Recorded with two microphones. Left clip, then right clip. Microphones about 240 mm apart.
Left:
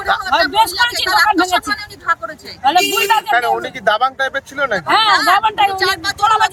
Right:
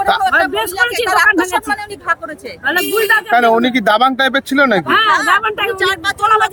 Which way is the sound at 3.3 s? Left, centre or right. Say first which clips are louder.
Right 5 dB; right.